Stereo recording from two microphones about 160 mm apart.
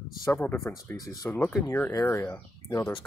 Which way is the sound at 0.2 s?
15° left (ahead or behind).